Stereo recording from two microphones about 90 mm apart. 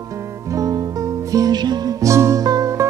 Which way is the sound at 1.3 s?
45° right (ahead or behind).